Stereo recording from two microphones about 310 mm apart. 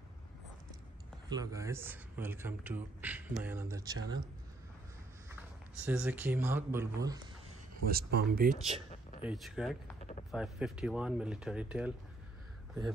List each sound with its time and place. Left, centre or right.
1.3 s a man's voice: centre
5.9 s a man's voice: centre
7.7 s speech: right
9.2 s speech: centre